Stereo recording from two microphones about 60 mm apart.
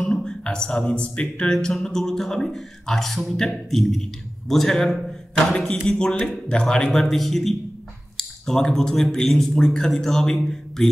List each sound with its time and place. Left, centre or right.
0.1 s speech: centre
6.9 s speech: centre